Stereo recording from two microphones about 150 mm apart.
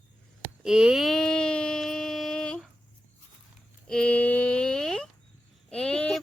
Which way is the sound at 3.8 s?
5° left (ahead or behind).